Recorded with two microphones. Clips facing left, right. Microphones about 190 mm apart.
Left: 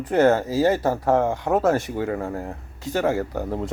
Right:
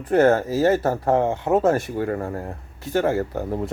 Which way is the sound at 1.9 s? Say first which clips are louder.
Right 1 dB; centre (ahead or behind).